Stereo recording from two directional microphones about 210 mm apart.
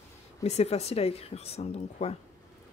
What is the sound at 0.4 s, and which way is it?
A woman's voice, 30° left (ahead or behind).